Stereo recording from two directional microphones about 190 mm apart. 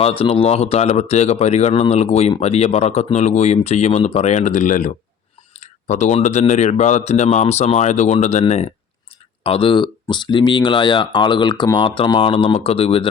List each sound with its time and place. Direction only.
0.0 s speech: 30° left (ahead or behind)